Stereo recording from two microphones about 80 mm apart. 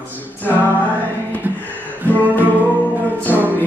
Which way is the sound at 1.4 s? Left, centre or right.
Right.